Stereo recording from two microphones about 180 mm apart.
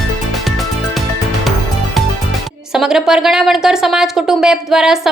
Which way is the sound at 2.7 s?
5° right (ahead or behind).